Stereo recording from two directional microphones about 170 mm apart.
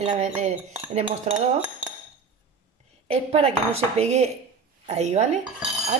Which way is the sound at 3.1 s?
35° right (ahead or behind).